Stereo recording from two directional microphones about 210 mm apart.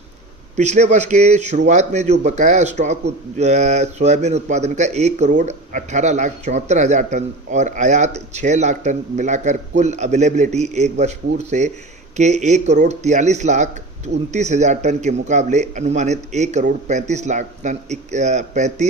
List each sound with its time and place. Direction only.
0.5 s speech: 35° right (ahead or behind)